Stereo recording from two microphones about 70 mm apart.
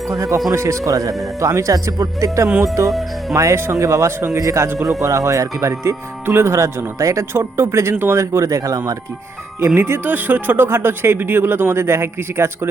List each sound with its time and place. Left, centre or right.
0.1 s speech: right
9.6 s speech: right